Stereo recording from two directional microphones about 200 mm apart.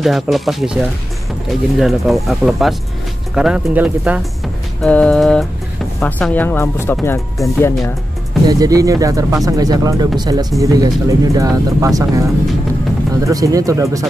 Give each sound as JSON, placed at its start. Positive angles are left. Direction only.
{"t": 0.0, "sound": "speech", "side_deg": 0}
{"t": 4.8, "sound": "speech", "side_deg": 5}
{"t": 8.5, "sound": "speech", "side_deg": -15}